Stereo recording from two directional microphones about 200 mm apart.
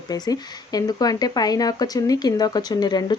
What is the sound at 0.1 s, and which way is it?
Speech, 20° left (ahead or behind).